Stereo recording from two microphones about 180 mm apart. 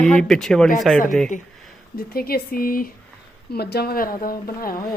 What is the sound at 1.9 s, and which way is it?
Speech, 55° left (ahead or behind).